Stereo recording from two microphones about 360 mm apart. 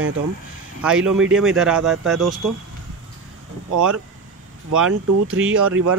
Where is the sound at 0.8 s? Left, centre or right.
Centre.